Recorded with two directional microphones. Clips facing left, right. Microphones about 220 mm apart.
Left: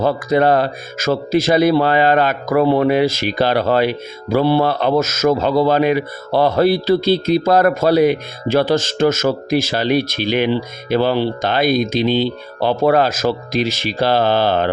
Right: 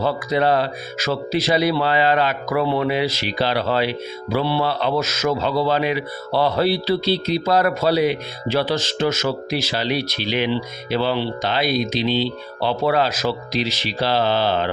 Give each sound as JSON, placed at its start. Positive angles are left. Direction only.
{"t": 0.0, "sound": "speech", "side_deg": 50}